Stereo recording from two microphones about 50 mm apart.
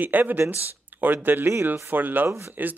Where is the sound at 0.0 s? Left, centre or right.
Right.